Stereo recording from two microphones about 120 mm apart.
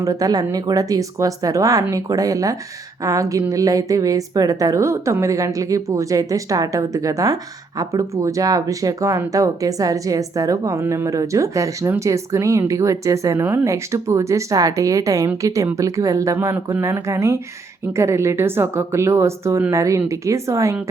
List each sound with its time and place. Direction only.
0.0 s speech: 30° right (ahead or behind)